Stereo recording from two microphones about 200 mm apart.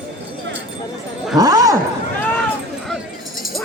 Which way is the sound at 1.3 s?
15° right (ahead or behind).